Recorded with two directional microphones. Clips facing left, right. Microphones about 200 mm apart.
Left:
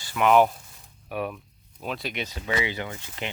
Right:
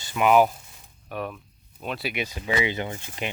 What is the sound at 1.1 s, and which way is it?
Speech, 10° left (ahead or behind).